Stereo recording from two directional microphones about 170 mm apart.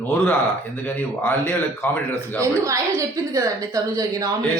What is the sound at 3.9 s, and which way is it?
Speech, 20° right (ahead or behind).